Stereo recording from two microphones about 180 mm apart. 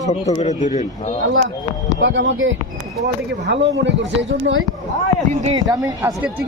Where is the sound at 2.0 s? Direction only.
90° right.